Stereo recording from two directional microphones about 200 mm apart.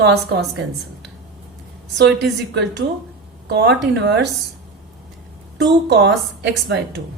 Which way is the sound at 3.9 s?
60° right (ahead or behind).